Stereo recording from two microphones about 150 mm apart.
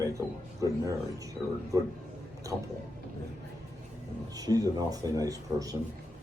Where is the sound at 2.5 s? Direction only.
5° right (ahead or behind).